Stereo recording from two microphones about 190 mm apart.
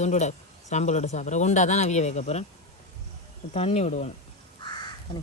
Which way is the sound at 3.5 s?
35° left (ahead or behind).